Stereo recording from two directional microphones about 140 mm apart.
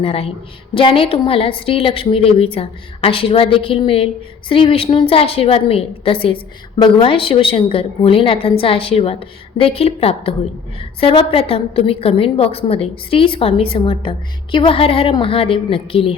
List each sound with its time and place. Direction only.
0.0 s a woman's voice: 45° left (ahead or behind)